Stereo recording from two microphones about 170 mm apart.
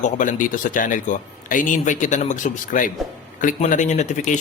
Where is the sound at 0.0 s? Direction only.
50° left (ahead or behind).